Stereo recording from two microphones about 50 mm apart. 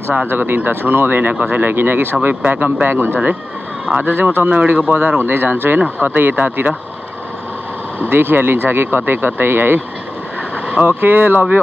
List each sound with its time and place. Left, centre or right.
0.3 s speech: right
0.6 s speech: right
4.9 s speech: right
8.1 s speech: right
10.8 s speech: right